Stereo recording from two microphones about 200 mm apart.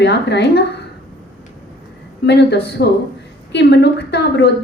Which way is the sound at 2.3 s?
55° left (ahead or behind).